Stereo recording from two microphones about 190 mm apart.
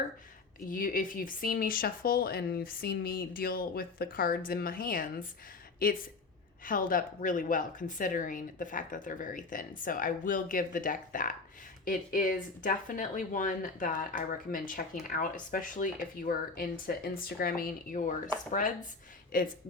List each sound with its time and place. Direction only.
0.7 s a woman's voice: 45° left (ahead or behind)